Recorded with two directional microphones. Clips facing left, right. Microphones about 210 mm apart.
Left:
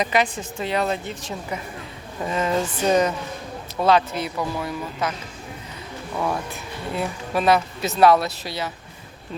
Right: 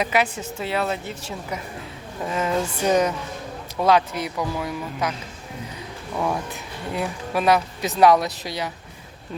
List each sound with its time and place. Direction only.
0.0 s speech: 10° right (ahead or behind)
6.1 s speech: 5° right (ahead or behind)
6.5 s speech: 15° right (ahead or behind)